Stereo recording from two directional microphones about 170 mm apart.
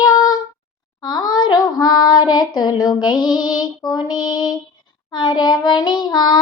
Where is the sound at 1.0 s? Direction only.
25° left (ahead or behind).